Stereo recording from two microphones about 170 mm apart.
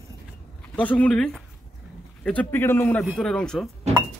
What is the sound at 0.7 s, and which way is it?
A man's voice, 10° left (ahead or behind).